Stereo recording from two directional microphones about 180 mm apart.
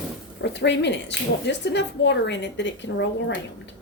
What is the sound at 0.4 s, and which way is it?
A woman's voice, 75° left (ahead or behind).